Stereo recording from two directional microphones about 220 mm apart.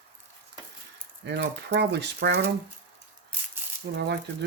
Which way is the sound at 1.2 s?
50° right (ahead or behind).